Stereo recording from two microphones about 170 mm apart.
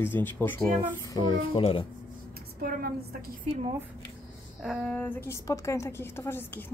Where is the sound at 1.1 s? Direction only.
30° left (ahead or behind).